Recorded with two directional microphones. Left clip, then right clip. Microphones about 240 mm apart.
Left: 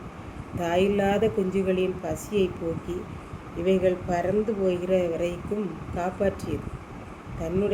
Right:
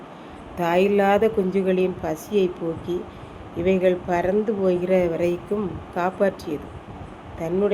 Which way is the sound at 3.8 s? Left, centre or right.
Centre.